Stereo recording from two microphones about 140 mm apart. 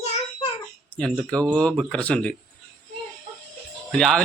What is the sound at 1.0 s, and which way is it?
Speech, 5° left (ahead or behind).